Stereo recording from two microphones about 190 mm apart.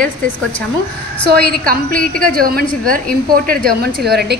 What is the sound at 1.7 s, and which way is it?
Speech, 50° right (ahead or behind).